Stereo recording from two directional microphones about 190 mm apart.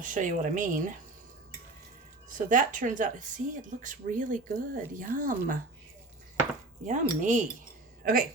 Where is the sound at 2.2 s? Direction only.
45° right (ahead or behind).